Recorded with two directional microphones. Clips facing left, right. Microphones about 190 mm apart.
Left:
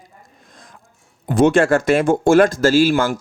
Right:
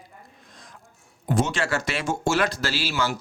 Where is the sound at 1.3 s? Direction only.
55° left (ahead or behind).